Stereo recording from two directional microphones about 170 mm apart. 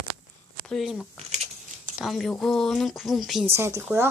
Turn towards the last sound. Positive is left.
turn(degrees=-15)  # may be behind; listen again after turning